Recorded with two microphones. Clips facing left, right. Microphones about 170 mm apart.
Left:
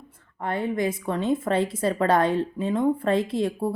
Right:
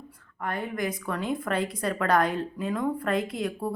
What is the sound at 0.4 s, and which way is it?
A woman's voice, 25° left (ahead or behind).